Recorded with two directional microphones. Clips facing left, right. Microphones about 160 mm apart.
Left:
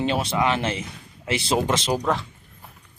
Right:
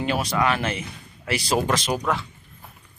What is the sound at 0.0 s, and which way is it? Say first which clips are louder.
A man's voice: left 1 dB; 25° left (ahead or behind).